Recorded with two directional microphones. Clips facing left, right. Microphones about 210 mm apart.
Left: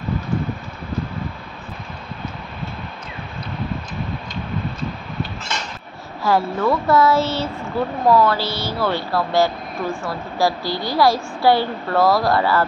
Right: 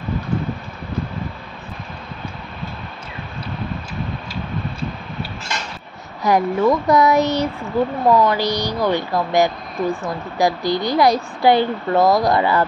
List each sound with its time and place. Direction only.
6.2 s speech: 15° right (ahead or behind)